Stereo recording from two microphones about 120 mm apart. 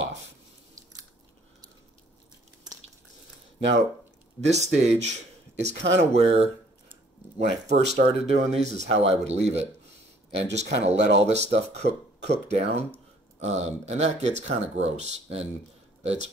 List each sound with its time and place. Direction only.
4.5 s speech: 70° right (ahead or behind)